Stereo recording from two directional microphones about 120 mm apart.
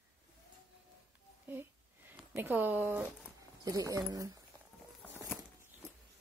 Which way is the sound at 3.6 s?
30° right (ahead or behind).